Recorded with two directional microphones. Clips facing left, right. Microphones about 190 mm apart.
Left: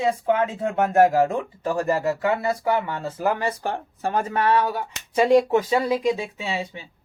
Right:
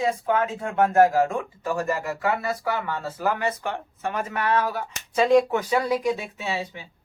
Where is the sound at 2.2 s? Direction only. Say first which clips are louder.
Left 3 dB; 20° left (ahead or behind).